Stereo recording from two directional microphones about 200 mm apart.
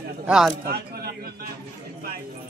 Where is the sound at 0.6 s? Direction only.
50° right (ahead or behind).